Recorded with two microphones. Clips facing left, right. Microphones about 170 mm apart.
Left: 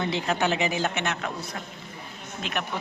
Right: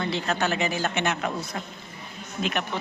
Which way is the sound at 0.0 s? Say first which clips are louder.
Left 1 dB; 15° left (ahead or behind).